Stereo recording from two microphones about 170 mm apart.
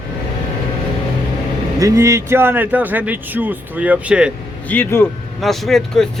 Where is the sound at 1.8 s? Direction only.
20° right (ahead or behind).